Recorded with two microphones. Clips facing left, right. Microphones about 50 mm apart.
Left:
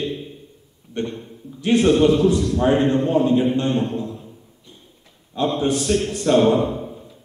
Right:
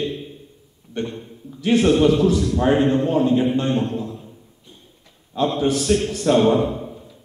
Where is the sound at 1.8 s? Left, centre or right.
Centre.